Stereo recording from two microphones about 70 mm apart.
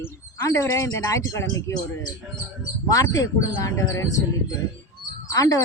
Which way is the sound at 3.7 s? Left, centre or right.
Left.